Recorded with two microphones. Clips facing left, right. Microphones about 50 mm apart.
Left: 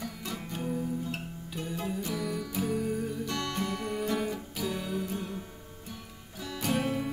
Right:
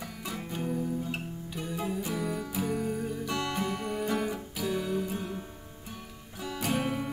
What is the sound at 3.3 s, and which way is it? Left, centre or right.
Music, centre.